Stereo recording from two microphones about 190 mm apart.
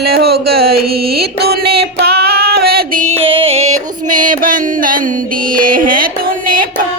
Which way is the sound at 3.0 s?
30° right (ahead or behind).